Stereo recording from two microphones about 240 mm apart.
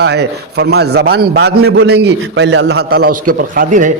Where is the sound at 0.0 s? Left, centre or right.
Right.